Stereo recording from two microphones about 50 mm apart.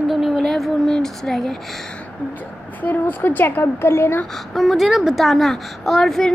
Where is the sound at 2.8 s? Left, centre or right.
Left.